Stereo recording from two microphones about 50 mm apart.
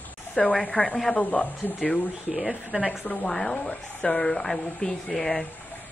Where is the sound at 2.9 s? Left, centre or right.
Centre.